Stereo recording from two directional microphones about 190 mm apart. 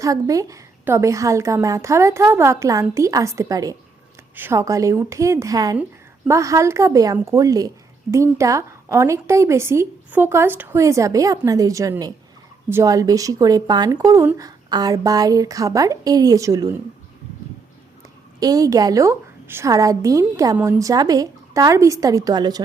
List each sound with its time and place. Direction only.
0.0 s a woman's voice: 15° right (ahead or behind)
18.3 s a woman's voice: 20° right (ahead or behind)